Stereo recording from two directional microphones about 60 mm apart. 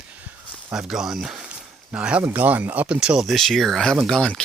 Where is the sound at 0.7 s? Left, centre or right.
Centre.